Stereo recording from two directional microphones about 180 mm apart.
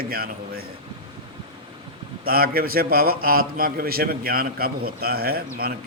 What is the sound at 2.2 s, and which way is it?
Mantra, 55° right (ahead or behind).